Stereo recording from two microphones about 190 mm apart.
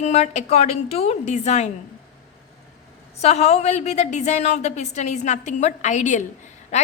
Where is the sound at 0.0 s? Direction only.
35° left (ahead or behind).